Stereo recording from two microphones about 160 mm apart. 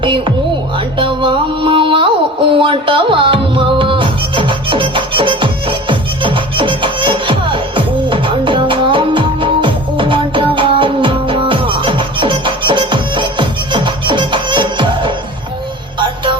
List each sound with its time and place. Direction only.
0.0 s speech: 30° right (ahead or behind)
0.9 s music: 30° right (ahead or behind)